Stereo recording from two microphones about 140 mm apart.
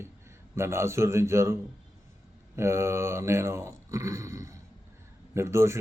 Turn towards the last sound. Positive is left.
turn(degrees=-20)  # may be behind; listen again after turning